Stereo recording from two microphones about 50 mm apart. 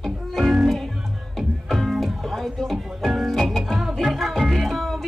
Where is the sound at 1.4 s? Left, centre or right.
Centre.